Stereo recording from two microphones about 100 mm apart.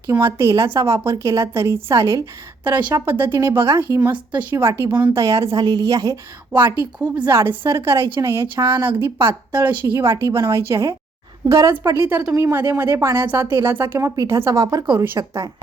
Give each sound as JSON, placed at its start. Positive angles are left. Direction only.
{"t": 0.1, "sound": "a woman's voice", "side_deg": -25}
{"t": 2.6, "sound": "a woman's voice", "side_deg": -20}
{"t": 4.3, "sound": "speech", "side_deg": -15}
{"t": 4.5, "sound": "a woman's voice", "side_deg": -30}
{"t": 6.5, "sound": "a woman's voice", "side_deg": -20}